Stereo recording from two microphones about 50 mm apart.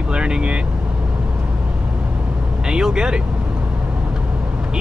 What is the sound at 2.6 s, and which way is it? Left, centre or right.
Speech, centre.